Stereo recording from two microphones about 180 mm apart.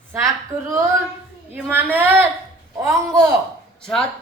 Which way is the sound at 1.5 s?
10° right (ahead or behind).